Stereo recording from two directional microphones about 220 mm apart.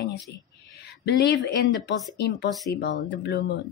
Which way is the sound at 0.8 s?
50° left (ahead or behind).